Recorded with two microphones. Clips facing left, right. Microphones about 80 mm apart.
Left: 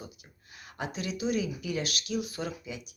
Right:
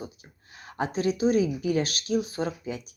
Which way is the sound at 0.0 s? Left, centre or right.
Right.